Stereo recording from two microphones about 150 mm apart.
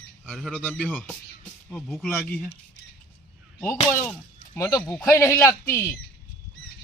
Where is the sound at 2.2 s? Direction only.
10° left (ahead or behind).